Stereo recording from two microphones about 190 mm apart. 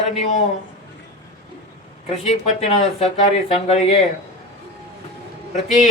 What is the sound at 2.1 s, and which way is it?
A man's voice, 35° left (ahead or behind).